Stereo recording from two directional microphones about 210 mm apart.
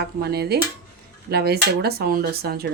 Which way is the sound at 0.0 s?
50° right (ahead or behind).